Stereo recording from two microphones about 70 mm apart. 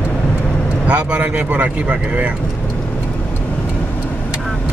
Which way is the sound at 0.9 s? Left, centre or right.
Centre.